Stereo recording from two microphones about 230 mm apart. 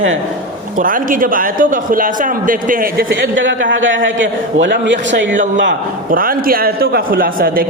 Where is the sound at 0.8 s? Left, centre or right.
Right.